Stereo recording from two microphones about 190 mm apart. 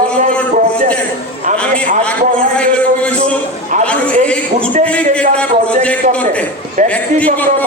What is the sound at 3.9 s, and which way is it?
A man's voice, 5° left (ahead or behind).